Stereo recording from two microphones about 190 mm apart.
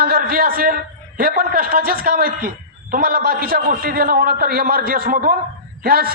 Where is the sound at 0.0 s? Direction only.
50° right (ahead or behind).